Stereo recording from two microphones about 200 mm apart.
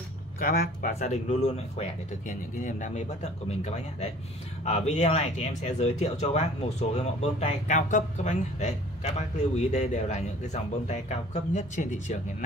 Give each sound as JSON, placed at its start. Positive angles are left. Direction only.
{"t": 0.4, "sound": "speech", "side_deg": 45}